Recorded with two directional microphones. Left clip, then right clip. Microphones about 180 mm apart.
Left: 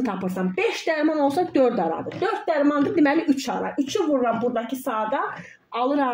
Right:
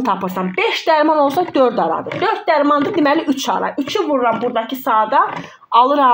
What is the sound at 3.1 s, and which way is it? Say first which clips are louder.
Speech: right 5 dB; 35° right (ahead or behind).